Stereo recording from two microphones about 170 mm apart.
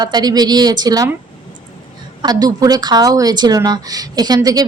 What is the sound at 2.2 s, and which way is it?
A woman's voice, 20° right (ahead or behind).